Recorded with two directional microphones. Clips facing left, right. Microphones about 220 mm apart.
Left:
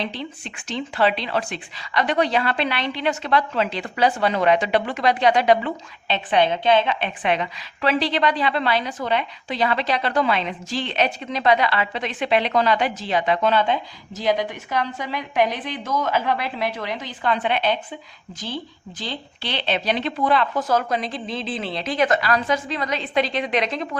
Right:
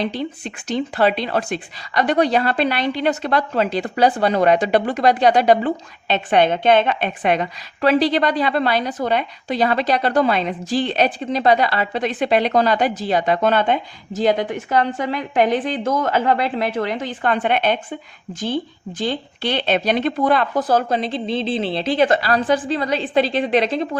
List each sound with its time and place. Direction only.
0.2 s speech: 40° right (ahead or behind)
20.7 s speech: 30° right (ahead or behind)